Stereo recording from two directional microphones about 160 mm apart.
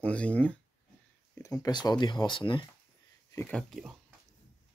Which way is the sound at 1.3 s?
20° left (ahead or behind).